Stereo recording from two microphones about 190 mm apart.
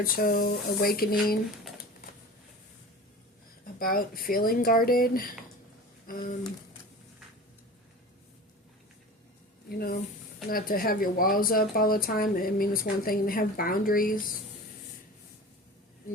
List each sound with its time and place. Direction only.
0.0 s speech: 50° left (ahead or behind)
3.8 s speech: 50° left (ahead or behind)
9.6 s speech: 50° left (ahead or behind)